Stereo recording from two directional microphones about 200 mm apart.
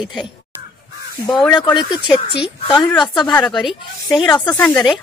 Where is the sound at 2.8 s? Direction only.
5° left (ahead or behind).